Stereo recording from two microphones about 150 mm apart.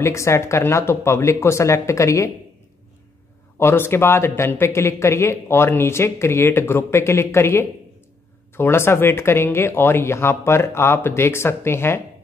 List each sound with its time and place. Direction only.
0.0 s speech: 20° left (ahead or behind)
3.5 s speech: 15° left (ahead or behind)